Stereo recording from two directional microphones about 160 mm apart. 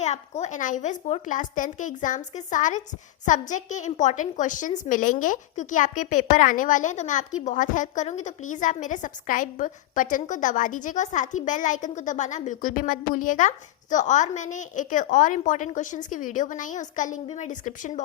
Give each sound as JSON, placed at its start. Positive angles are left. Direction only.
{"t": 0.0, "sound": "a woman's voice", "side_deg": 45}